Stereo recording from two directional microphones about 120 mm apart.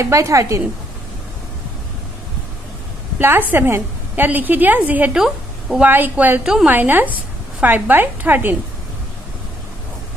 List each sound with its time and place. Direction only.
0.0 s a woman's voice: 25° right (ahead or behind)
3.2 s a woman's voice: 15° right (ahead or behind)
5.9 s a woman's voice: 15° right (ahead or behind)